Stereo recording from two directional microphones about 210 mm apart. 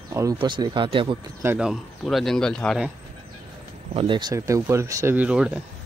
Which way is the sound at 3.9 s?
25° right (ahead or behind).